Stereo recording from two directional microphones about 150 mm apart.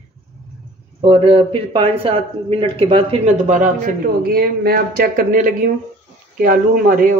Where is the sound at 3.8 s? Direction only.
70° right (ahead or behind).